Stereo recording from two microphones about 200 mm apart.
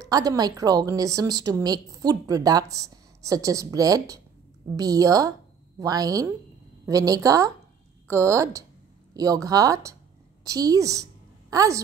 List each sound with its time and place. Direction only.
0.0 s a woman's voice: 20° right (ahead or behind)